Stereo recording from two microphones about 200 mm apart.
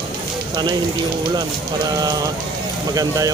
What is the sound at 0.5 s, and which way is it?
Speech, 20° right (ahead or behind).